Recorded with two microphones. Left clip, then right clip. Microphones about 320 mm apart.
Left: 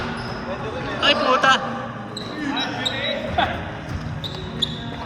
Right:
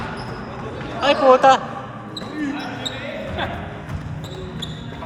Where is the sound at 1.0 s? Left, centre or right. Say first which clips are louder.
Right 4 dB; centre.